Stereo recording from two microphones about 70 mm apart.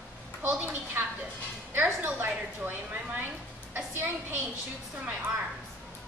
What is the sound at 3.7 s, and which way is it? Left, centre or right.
Speech, right.